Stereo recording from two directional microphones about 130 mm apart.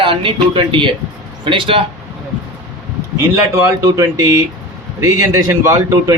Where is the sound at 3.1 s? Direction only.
20° right (ahead or behind).